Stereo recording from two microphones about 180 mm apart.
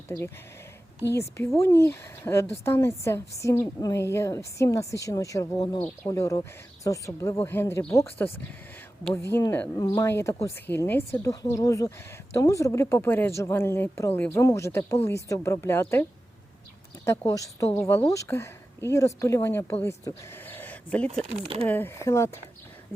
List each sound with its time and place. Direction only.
1.1 s speech: 15° left (ahead or behind)
9.2 s speech: 15° left (ahead or behind)
17.1 s speech: 15° left (ahead or behind)
21.3 s speech: 30° right (ahead or behind)
21.7 s speech: 10° left (ahead or behind)